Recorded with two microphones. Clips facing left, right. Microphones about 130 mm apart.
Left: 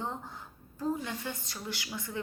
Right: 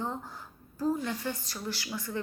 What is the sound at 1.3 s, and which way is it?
Speech, 25° left (ahead or behind).